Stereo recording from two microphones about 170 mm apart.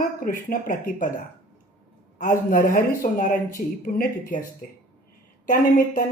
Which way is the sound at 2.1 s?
50° left (ahead or behind).